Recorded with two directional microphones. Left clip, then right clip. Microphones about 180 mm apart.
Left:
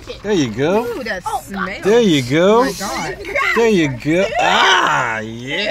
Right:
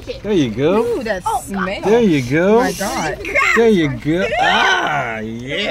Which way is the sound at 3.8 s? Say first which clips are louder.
Left 2 dB; 60° left (ahead or behind).